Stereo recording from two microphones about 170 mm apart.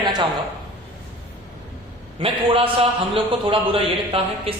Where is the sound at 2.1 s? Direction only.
35° right (ahead or behind).